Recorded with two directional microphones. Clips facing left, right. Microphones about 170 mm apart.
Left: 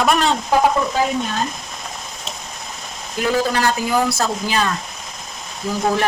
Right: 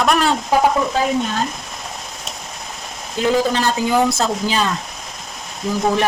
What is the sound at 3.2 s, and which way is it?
A man's voice, 20° right (ahead or behind).